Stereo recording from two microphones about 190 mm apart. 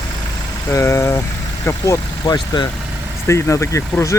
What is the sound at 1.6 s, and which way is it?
Speech, 20° left (ahead or behind).